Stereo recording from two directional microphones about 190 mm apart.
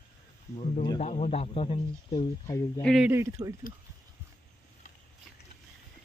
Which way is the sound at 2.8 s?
Centre (ahead or behind).